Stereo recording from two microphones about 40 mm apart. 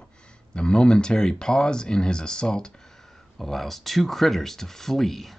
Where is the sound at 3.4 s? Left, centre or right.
Centre.